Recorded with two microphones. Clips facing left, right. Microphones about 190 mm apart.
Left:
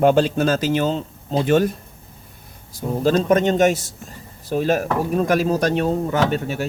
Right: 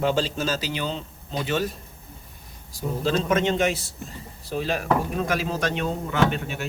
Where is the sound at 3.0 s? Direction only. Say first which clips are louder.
Left 6 dB; 45° left (ahead or behind).